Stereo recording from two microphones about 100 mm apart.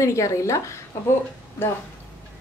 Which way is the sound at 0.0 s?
30° left (ahead or behind).